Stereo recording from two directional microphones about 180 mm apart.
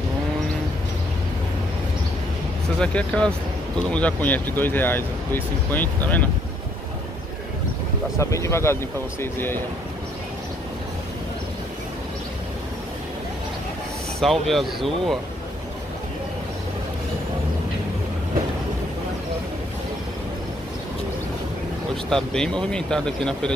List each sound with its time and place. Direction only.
2.8 s speech: 5° left (ahead or behind)
8.2 s speech: 15° left (ahead or behind)
14.2 s speech: centre (ahead or behind)
22.1 s speech: 5° left (ahead or behind)